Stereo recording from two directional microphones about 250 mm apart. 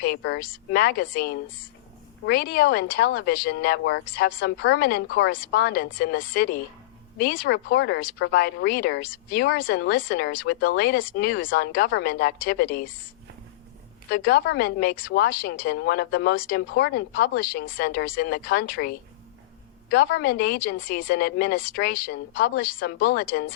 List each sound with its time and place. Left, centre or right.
0.0 s speech: left
14.1 s speech: left